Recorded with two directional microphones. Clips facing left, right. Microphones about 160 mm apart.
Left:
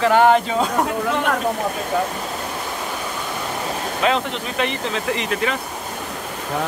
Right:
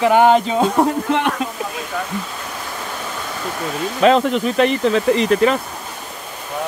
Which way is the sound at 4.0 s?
40° right (ahead or behind).